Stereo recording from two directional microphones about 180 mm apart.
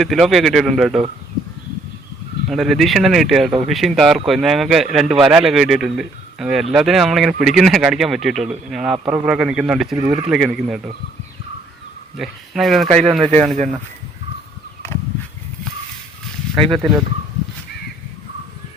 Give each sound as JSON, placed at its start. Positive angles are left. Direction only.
{"t": 0.0, "sound": "speech", "side_deg": 0}
{"t": 2.5, "sound": "speech", "side_deg": 0}
{"t": 12.1, "sound": "speech", "side_deg": 0}
{"t": 12.9, "sound": "speech", "side_deg": -35}
{"t": 16.6, "sound": "speech", "side_deg": -30}